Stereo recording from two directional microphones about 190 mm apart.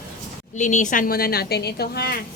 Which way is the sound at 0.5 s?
40° left (ahead or behind).